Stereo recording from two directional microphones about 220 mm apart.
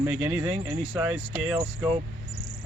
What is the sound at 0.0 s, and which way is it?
Speech, 10° right (ahead or behind).